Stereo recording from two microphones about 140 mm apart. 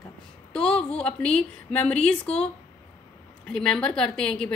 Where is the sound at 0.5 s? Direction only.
5° left (ahead or behind).